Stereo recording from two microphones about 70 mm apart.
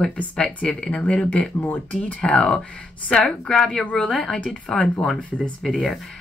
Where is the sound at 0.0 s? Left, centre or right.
Centre.